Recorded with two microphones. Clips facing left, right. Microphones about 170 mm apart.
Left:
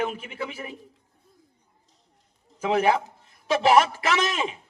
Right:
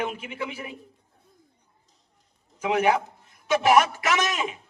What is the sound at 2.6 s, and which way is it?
Speech, 30° left (ahead or behind).